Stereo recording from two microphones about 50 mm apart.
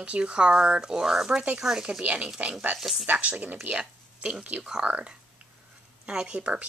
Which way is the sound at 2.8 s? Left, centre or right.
Centre.